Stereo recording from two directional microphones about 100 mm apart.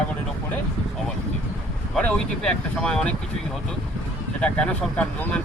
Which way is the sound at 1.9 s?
10° left (ahead or behind).